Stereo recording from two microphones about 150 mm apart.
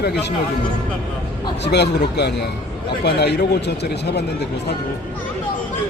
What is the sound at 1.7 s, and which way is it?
Speech, 90° left.